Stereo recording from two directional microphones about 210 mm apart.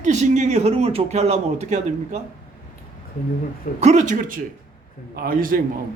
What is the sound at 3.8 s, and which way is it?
A woman's voice, 35° right (ahead or behind).